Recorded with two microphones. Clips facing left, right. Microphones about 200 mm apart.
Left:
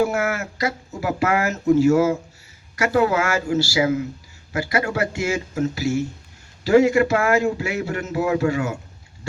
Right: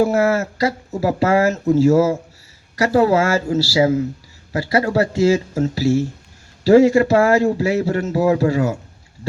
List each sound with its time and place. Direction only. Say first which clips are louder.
0.0 s speech: right 5 dB; 35° right (ahead or behind)